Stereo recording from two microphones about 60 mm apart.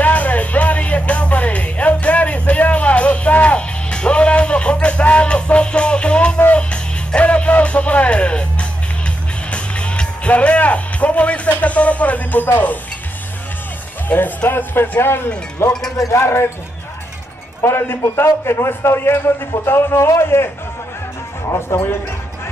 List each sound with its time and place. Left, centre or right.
0.0 s music: left
14.0 s a man's voice: left
17.6 s a man's voice: left
21.5 s a man's voice: left